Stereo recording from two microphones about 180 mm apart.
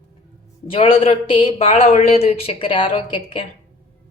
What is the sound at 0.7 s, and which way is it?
Speech, 35° left (ahead or behind).